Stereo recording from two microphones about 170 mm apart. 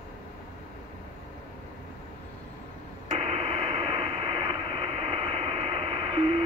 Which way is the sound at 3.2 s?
35° right (ahead or behind).